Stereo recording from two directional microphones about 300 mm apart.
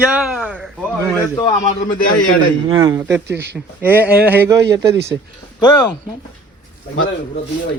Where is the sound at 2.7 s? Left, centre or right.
Centre.